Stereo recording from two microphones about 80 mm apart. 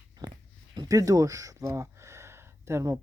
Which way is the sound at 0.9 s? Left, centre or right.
Right.